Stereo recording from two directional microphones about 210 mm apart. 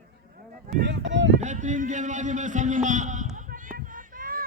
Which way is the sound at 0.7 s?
55° right (ahead or behind).